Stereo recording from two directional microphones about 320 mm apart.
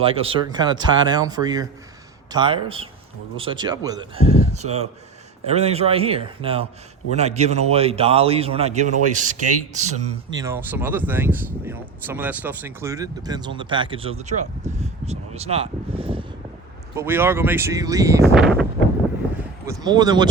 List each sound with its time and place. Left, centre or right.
0.0 s a man's voice: centre
10.4 s speech: centre
19.6 s speech: centre